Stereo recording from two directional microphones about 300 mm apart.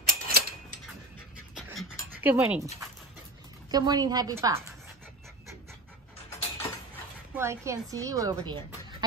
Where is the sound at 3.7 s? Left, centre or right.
Centre.